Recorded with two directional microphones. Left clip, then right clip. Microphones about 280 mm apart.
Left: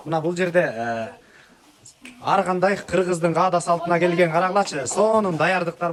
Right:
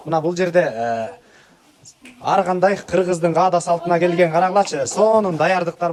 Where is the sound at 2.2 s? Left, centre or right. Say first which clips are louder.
Right 3 dB; centre.